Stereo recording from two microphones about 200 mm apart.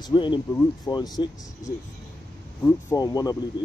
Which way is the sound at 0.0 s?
25° left (ahead or behind).